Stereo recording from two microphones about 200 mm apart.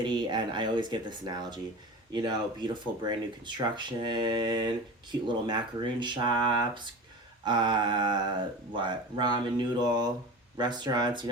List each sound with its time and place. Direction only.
0.0 s speech: 25° right (ahead or behind)